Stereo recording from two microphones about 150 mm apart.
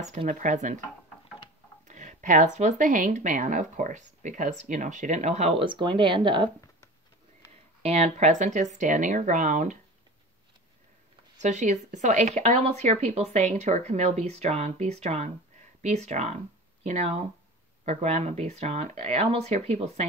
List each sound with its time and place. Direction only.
0.0 s speech: 50° right (ahead or behind)
1.9 s speech: 55° right (ahead or behind); by 6.5 s 35° right (ahead or behind)
7.8 s speech: 45° right (ahead or behind)
11.3 s speech: 50° right (ahead or behind)